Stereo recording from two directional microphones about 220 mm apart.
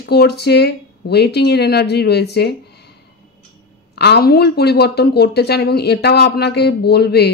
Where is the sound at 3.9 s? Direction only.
50° left (ahead or behind).